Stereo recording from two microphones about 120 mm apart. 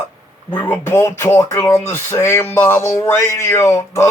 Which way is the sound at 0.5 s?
20° left (ahead or behind).